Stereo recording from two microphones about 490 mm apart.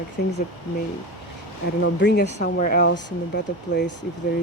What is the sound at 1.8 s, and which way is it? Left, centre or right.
Speech, left.